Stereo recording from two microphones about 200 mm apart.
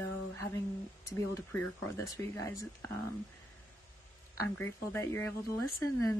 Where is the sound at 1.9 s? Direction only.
15° left (ahead or behind).